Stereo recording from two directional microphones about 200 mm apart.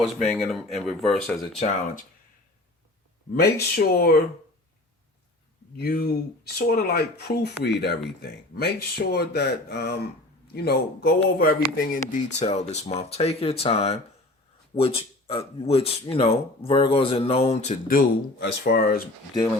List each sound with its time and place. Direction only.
0.0 s speech: centre (ahead or behind)
3.3 s speech: 55° left (ahead or behind)
5.7 s speech: 50° left (ahead or behind)